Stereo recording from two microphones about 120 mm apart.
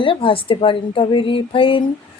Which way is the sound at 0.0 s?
45° left (ahead or behind).